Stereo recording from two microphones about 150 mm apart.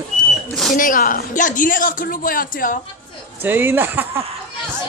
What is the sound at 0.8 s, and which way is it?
A man's voice, 65° left (ahead or behind).